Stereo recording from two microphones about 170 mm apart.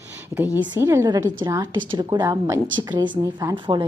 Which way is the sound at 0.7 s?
15° right (ahead or behind).